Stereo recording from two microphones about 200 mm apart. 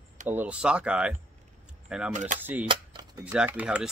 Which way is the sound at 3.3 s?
10° right (ahead or behind).